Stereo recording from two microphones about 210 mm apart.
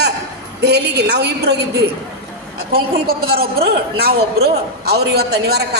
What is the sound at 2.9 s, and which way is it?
A man's voice, 45° right (ahead or behind).